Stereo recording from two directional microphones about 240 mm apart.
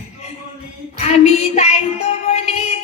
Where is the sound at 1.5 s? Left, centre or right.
Left.